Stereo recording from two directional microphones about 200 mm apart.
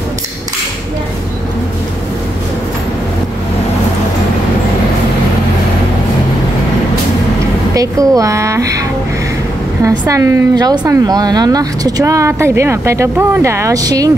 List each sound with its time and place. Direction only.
7.7 s speech: 15° right (ahead or behind)
9.8 s speech: 15° right (ahead or behind)